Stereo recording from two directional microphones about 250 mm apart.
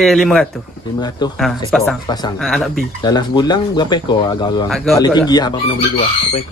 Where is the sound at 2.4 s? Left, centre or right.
Centre.